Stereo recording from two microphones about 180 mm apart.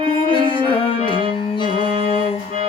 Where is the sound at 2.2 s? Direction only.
35° right (ahead or behind).